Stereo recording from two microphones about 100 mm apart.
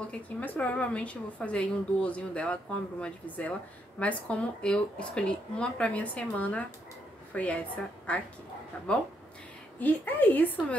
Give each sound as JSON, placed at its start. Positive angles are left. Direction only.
{"t": 0.4, "sound": "a woman's voice", "side_deg": 15}